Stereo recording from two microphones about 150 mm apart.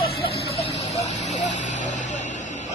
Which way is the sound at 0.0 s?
90° left.